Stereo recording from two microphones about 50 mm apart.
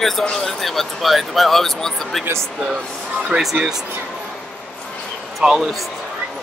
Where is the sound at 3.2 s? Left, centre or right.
Centre.